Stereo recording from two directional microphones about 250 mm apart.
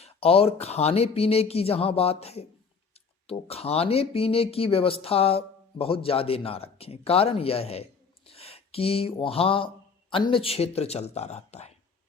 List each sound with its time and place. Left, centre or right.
0.0 s speech: left